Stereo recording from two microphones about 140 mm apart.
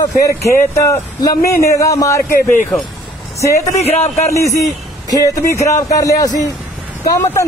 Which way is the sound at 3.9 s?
50° left (ahead or behind).